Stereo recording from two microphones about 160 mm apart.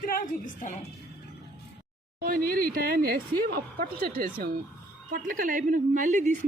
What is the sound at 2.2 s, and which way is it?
Speech, 60° right (ahead or behind).